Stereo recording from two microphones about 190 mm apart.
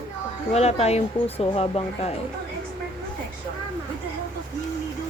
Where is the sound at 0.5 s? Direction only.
35° left (ahead or behind).